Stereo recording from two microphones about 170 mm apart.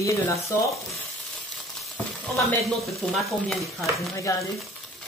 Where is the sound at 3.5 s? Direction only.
Centre (ahead or behind).